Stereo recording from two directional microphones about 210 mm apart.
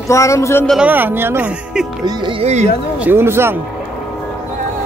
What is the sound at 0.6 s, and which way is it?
Speech, 5° right (ahead or behind).